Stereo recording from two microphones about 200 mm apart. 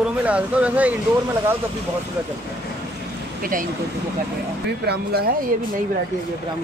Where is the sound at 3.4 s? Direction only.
45° right (ahead or behind).